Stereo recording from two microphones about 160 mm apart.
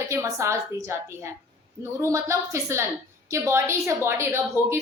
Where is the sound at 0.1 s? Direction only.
15° right (ahead or behind).